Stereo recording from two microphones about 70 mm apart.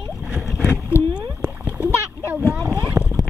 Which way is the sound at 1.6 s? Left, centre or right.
Centre.